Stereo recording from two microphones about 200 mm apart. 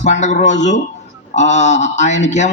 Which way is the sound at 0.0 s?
35° left (ahead or behind).